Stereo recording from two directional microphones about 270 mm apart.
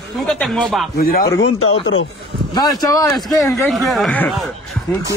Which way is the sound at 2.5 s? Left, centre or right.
Centre.